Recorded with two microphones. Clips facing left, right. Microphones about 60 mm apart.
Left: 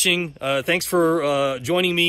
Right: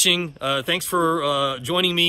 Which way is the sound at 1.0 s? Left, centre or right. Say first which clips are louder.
Left 1 dB; left.